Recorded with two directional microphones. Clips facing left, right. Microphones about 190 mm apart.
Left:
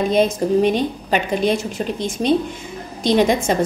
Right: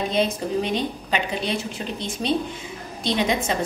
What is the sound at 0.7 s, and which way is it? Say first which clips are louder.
A woman's voice: left 5 dB; 45° left (ahead or behind).